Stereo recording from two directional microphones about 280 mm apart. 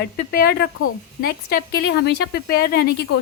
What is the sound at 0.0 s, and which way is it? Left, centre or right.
A woman's voice, left.